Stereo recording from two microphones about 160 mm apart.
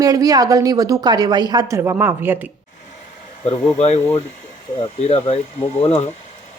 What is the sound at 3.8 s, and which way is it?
Speech, 40° left (ahead or behind).